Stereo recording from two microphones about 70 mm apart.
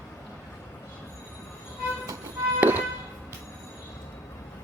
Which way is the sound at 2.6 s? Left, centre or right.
Right.